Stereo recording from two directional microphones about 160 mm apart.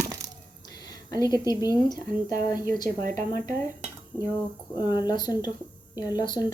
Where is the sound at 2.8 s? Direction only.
55° right (ahead or behind).